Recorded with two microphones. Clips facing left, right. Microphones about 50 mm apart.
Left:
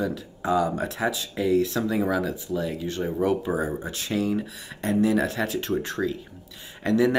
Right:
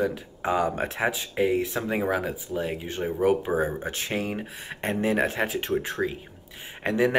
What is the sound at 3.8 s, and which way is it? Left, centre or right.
Speech, right.